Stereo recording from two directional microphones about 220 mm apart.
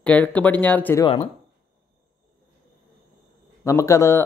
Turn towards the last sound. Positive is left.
turn(degrees=15)  # may be behind; listen again after turning